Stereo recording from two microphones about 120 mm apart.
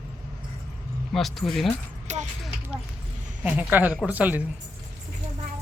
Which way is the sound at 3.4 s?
15° right (ahead or behind).